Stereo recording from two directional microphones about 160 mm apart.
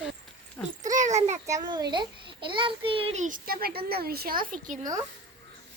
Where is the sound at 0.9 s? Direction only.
45° right (ahead or behind).